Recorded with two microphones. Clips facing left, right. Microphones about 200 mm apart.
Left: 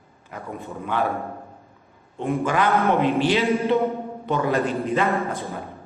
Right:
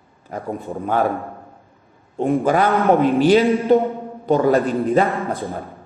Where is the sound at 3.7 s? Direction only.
40° right (ahead or behind).